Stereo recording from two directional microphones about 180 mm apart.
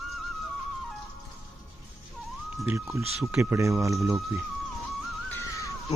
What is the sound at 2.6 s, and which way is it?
Speech, 15° right (ahead or behind).